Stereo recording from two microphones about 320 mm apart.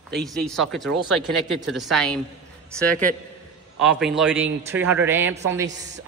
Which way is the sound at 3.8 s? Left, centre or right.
Centre.